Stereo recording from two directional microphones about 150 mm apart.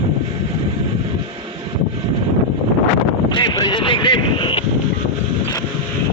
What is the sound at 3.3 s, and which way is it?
Vehicle, 30° left (ahead or behind).